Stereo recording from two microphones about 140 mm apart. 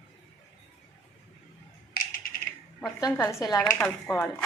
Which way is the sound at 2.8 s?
25° left (ahead or behind).